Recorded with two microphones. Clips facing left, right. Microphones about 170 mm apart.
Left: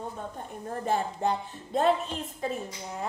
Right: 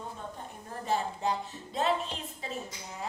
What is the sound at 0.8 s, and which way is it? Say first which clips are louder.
Music: left 3 dB; 55° left (ahead or behind).